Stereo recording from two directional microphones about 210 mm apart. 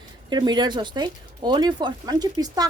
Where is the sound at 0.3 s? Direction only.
20° right (ahead or behind).